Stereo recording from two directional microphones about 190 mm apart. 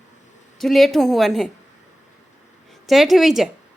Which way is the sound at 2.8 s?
Centre (ahead or behind).